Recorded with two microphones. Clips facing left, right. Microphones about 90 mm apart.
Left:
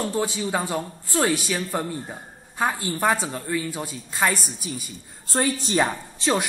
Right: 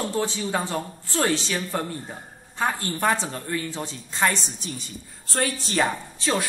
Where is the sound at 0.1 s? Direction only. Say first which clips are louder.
Left 1 dB; 15° left (ahead or behind).